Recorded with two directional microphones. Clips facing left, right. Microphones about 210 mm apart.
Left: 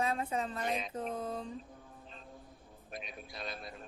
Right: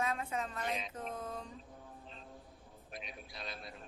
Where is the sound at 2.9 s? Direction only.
45° left (ahead or behind).